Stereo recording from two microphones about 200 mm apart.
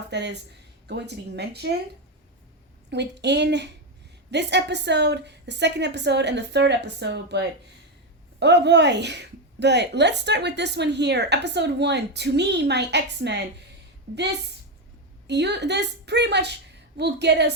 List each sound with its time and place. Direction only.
0.1 s speech: 60° right (ahead or behind)
2.9 s speech: 60° right (ahead or behind)
15.3 s speech: 60° right (ahead or behind)